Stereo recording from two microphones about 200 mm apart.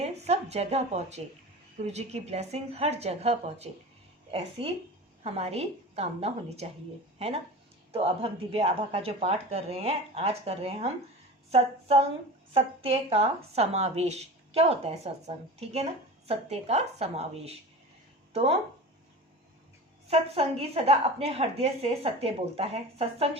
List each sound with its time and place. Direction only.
0.0 s a woman's voice: 35° right (ahead or behind)
20.1 s a woman's voice: 30° right (ahead or behind)